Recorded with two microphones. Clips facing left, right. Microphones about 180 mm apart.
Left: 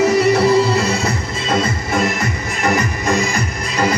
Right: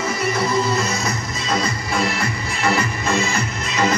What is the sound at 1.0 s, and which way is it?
Music, 25° left (ahead or behind).